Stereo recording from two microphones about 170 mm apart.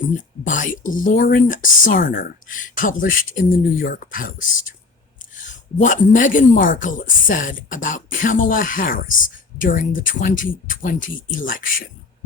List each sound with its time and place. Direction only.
0.4 s speech: 50° left (ahead or behind)